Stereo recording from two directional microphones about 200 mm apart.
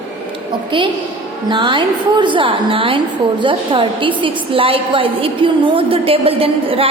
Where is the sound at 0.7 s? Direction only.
25° right (ahead or behind).